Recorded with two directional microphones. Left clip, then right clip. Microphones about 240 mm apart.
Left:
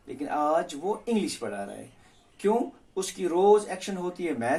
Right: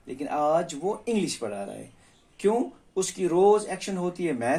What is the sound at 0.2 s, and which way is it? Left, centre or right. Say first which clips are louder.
Speech: right 1 dB; right.